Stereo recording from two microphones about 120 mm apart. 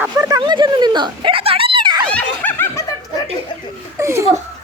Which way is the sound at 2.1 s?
15° left (ahead or behind).